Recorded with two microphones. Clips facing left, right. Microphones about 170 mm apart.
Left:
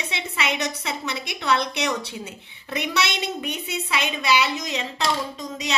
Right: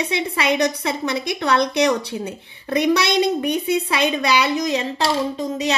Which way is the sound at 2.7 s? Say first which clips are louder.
Right 9 dB; 40° right (ahead or behind).